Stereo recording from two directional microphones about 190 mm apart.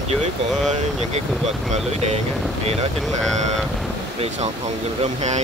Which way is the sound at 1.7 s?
35° right (ahead or behind).